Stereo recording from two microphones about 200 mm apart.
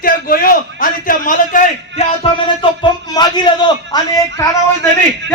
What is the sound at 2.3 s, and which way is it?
A man's voice, 25° left (ahead or behind).